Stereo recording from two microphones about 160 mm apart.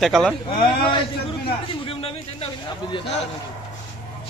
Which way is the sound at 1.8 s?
35° left (ahead or behind).